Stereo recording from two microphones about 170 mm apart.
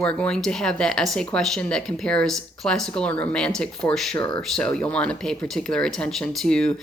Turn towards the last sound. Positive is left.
turn(degrees=5)  # may be behind; listen again after turning